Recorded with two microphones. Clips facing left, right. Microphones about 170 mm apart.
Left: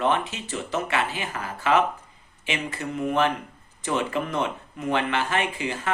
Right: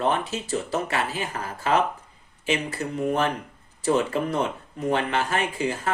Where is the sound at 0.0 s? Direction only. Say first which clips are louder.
Even; 40° right (ahead or behind).